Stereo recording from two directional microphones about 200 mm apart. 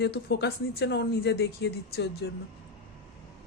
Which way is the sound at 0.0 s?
55° left (ahead or behind).